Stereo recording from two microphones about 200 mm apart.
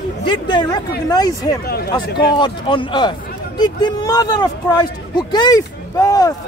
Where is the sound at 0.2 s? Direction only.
25° left (ahead or behind).